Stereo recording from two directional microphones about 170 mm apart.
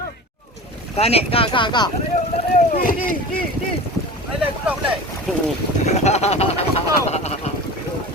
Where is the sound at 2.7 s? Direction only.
55° left (ahead or behind).